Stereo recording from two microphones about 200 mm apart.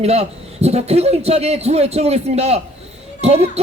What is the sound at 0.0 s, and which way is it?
A man's voice, 30° right (ahead or behind).